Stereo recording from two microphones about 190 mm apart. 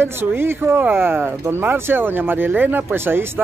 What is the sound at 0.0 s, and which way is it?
Speech, 10° right (ahead or behind).